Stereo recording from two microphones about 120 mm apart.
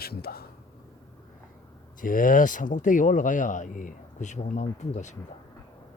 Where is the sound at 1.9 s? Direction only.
90° left.